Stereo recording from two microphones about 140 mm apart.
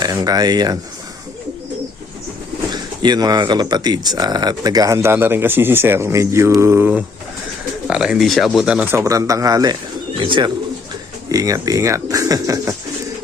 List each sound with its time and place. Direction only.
0.0 s speech: 25° right (ahead or behind)
2.7 s speech: 30° right (ahead or behind)
10.2 s speech: 35° right (ahead or behind)
11.3 s speech: 25° right (ahead or behind)